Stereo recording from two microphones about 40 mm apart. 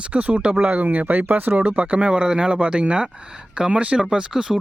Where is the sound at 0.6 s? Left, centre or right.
Right.